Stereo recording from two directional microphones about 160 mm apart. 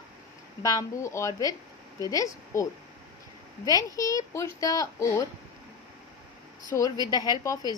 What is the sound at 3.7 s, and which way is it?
A woman's voice, 20° left (ahead or behind).